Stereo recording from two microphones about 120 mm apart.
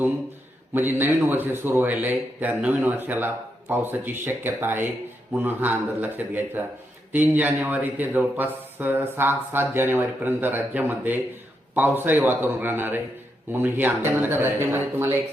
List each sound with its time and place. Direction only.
0.7 s a man's voice: 15° right (ahead or behind)